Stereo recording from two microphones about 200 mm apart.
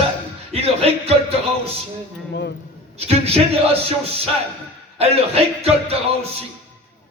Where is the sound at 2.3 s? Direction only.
60° left (ahead or behind).